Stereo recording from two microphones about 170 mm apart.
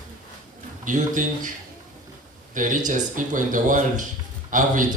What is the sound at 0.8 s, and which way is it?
Speech, 50° right (ahead or behind).